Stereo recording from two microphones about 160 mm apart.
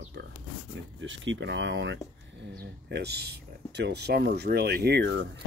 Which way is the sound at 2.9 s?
90° right.